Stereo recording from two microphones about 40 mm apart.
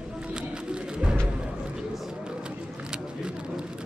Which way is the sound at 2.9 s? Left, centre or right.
Centre.